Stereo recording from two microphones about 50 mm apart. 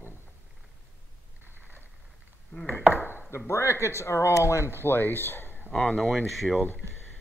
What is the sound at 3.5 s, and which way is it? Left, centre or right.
Speech, left.